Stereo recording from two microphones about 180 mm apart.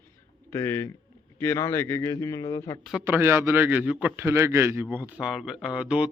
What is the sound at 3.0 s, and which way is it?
A man's voice, 10° right (ahead or behind).